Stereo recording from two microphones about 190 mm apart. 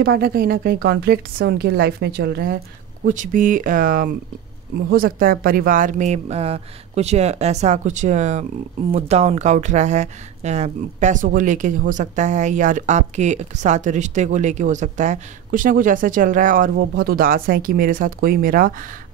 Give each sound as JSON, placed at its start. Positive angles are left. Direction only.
{"t": 0.0, "sound": "a woman's voice", "side_deg": -55}
{"t": 3.1, "sound": "speech", "side_deg": -45}